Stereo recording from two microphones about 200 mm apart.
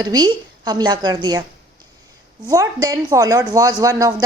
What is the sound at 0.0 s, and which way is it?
A woman's voice, 20° right (ahead or behind).